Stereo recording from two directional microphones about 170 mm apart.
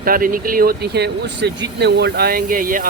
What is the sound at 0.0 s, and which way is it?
Speech, 55° right (ahead or behind).